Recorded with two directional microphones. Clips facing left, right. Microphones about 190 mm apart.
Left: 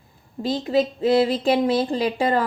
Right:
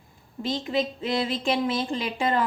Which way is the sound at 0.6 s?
40° left (ahead or behind).